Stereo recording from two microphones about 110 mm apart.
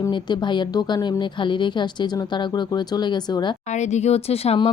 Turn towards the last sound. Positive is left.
turn(degrees=65)  # may be behind; listen again after turning